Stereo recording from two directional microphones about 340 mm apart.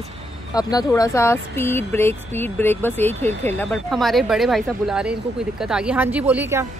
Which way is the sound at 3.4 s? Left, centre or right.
Centre.